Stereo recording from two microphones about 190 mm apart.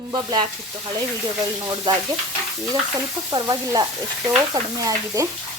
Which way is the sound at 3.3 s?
20° right (ahead or behind).